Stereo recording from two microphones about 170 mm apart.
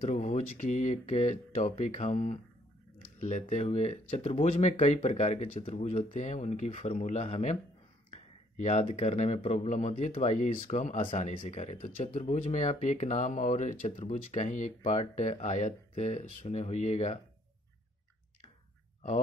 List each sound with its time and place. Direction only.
0.0 s speech: 40° left (ahead or behind)
8.1 s a sound: 45° left (ahead or behind)
8.9 s speech: 45° left (ahead or behind)